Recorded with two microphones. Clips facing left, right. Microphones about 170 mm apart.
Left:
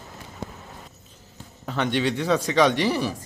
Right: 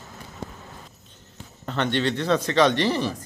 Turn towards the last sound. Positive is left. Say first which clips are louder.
# even
turn(degrees=10)  # may be behind; listen again after turning